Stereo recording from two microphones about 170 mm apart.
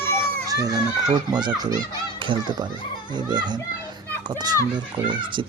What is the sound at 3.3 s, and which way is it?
Speech, 25° right (ahead or behind).